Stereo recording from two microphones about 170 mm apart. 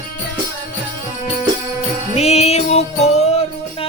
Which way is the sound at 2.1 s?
40° left (ahead or behind).